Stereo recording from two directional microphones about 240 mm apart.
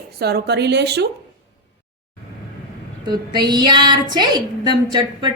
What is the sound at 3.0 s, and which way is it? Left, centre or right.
A woman's voice, centre.